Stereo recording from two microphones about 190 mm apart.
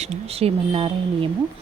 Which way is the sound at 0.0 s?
35° right (ahead or behind).